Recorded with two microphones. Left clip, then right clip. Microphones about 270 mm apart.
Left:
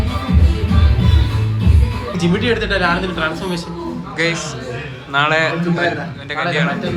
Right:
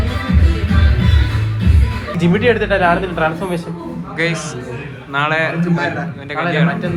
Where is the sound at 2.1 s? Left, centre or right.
Right.